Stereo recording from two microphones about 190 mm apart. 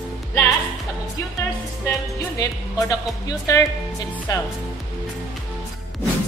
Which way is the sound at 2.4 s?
20° left (ahead or behind).